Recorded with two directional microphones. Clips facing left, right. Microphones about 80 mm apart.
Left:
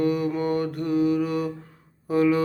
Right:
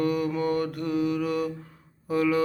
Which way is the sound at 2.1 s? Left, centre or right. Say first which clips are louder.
Left 3 dB; left.